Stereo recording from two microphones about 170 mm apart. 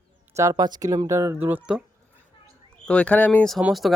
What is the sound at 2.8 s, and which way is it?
Speech, 5° left (ahead or behind).